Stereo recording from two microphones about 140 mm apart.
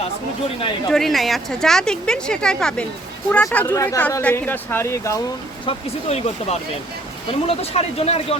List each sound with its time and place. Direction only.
0.0 s speech: 45° left (ahead or behind)
0.9 s a woman's voice: centre (ahead or behind); by 5.2 s 20° left (ahead or behind)
5.6 s speech: 45° left (ahead or behind)